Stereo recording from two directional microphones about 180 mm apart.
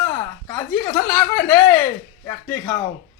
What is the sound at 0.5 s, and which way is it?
Speech, 15° left (ahead or behind).